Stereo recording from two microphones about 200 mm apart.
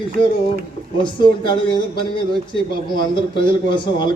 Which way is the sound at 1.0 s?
25° left (ahead or behind).